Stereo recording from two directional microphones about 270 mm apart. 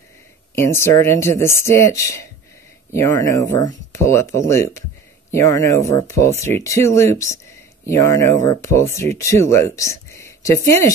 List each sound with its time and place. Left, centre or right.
0.6 s speech: centre